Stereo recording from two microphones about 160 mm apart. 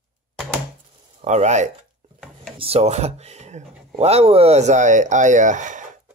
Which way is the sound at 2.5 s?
40° right (ahead or behind).